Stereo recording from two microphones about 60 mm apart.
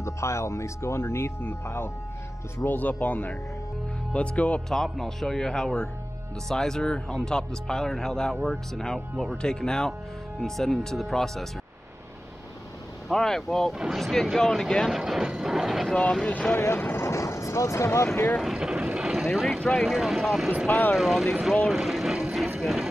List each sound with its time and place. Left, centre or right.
0.0 s speech: left
4.6 s speech: centre
13.1 s speech: centre
14.9 s speech: centre
15.9 s speech: centre
16.3 s speech: left
16.5 s speech: left
17.0 s speech: left
18.4 s speech: centre
18.9 s vehicle: centre
19.2 s speech: centre
21.6 s vehicle: centre
22.6 s music: centre